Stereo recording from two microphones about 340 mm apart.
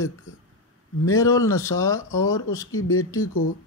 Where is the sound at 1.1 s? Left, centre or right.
Centre.